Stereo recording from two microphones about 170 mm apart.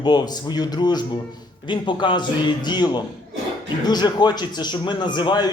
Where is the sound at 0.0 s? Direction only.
25° left (ahead or behind).